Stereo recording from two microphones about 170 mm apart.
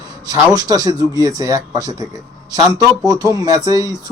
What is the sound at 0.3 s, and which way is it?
Speech, 20° right (ahead or behind).